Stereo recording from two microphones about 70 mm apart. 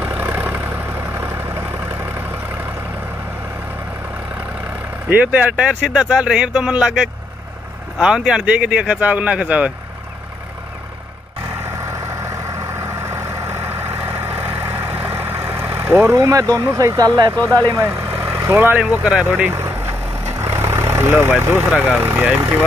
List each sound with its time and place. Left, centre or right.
0.0 s vehicle: right
5.1 s speech: right
11.6 s vehicle: right
16.2 s speech: right
17.7 s vehicle: right
18.5 s speech: right
18.8 s speech: centre
19.5 s vehicle: right
22.0 s speech: right